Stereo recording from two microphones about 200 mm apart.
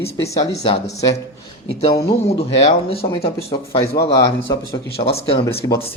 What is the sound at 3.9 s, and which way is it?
Speech, 55° left (ahead or behind).